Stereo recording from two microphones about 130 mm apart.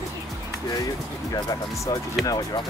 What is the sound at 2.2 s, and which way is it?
Speech, 30° left (ahead or behind).